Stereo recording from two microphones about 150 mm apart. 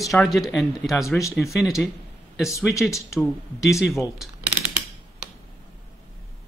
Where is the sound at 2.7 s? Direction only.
20° left (ahead or behind).